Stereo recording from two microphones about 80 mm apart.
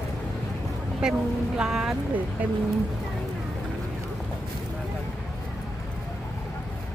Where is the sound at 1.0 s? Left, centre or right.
Centre.